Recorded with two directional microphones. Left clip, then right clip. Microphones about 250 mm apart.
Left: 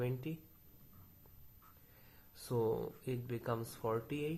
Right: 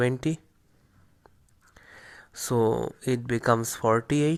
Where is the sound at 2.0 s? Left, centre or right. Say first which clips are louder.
Right 14 dB; right.